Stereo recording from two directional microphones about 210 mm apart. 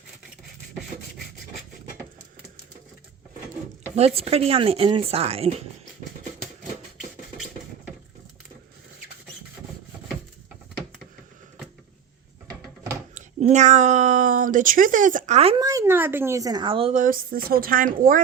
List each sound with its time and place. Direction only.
3.9 s a woman's voice: 30° right (ahead or behind)
7.3 s beatboxing: centre (ahead or behind)
13.1 s speech: 35° right (ahead or behind)
15.6 s a woman's voice: 15° right (ahead or behind); by 18.2 s 40° right (ahead or behind)